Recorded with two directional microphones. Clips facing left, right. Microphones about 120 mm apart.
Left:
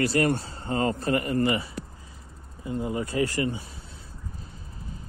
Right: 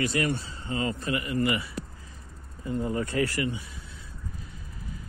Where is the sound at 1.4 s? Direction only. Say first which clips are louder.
Left 2 dB; 30° left (ahead or behind).